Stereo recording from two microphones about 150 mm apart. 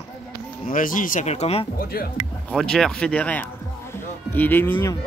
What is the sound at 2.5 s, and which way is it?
Speech, 5° left (ahead or behind).